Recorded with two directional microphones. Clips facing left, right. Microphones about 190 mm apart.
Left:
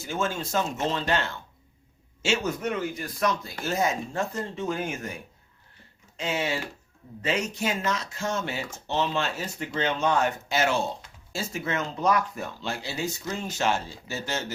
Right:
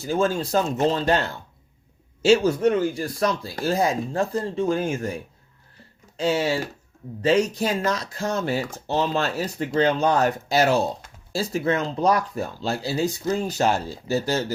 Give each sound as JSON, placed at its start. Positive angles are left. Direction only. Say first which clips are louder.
{"t": 0.0, "sound": "speech", "louder": "right 7 dB", "side_deg": -35}